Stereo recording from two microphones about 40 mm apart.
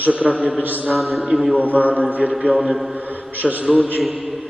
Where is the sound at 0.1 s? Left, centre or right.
Right.